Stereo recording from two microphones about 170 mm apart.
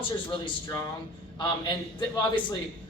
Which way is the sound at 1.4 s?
25° left (ahead or behind).